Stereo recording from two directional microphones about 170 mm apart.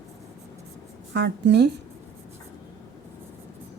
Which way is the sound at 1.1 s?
90° right.